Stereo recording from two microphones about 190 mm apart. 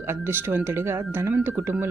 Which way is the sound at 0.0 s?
10° right (ahead or behind).